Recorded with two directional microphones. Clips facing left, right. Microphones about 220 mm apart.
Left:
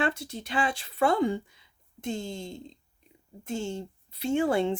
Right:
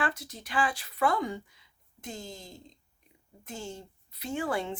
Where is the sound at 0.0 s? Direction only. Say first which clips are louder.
Left 4 dB; 25° left (ahead or behind).